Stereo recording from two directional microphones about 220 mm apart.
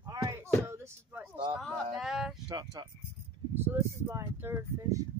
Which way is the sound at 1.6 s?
Centre (ahead or behind).